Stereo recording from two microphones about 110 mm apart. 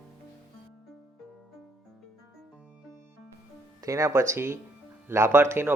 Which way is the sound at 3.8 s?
30° right (ahead or behind).